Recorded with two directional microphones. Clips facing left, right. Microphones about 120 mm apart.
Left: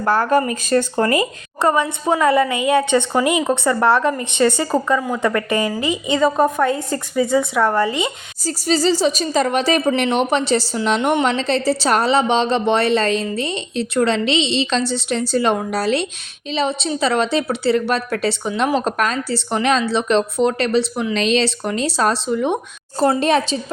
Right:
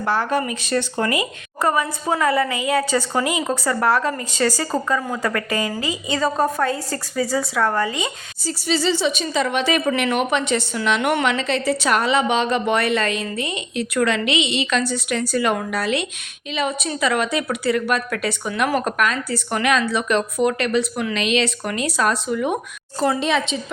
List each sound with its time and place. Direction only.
0.0 s speech: 45° left (ahead or behind)
1.6 s speech: 25° left (ahead or behind)
4.7 s a woman's voice: 10° left (ahead or behind)
5.2 s speech: 25° left (ahead or behind)
8.4 s a woman's voice: 40° left (ahead or behind)
11.0 s speech: 20° left (ahead or behind)
11.3 s a woman's voice: 35° left (ahead or behind)
23.0 s a woman's voice: 40° left (ahead or behind)